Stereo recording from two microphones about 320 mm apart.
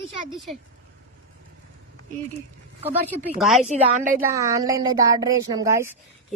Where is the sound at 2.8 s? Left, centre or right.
Centre.